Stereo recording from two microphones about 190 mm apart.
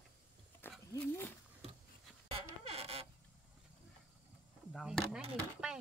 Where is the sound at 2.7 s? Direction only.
30° right (ahead or behind).